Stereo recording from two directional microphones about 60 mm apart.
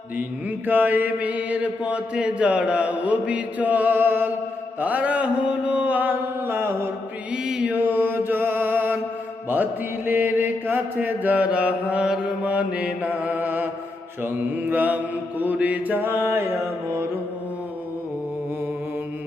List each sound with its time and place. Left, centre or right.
0.7 s mantra: right
7.4 s mantra: centre
7.7 s mantra: right
10.1 s mantra: right
16.5 s music: right